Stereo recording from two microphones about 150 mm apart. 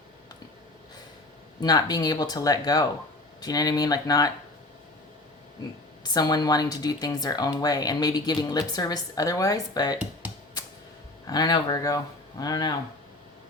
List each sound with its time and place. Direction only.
1.6 s speech: 25° left (ahead or behind)
6.0 s speech: 25° left (ahead or behind)
11.3 s speech: 25° left (ahead or behind)